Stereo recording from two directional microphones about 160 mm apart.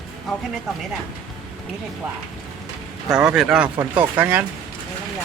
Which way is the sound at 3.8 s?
20° right (ahead or behind).